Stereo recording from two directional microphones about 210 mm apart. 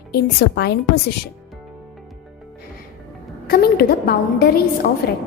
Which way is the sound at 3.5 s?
45° left (ahead or behind).